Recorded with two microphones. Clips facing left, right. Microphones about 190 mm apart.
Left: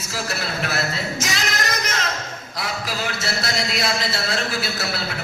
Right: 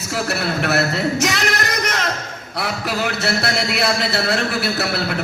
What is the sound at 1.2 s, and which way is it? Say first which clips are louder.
Music: right 5 dB; 60° right (ahead or behind).